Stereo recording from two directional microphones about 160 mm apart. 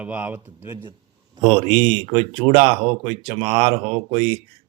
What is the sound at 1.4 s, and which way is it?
Speech, 30° right (ahead or behind).